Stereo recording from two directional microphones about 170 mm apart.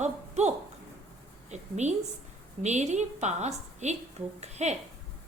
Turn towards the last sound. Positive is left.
turn(degrees=-40)  # may be behind; listen again after turning